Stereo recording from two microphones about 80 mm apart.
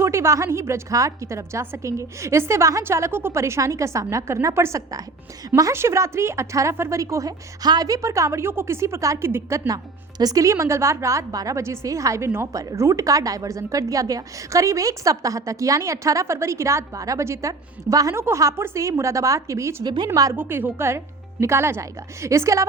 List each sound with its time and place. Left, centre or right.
0.0 s a woman's voice: right
9.6 s a woman's voice: right
18.1 s a woman's voice: right
19.8 s a woman's voice: right
20.3 s a woman's voice: right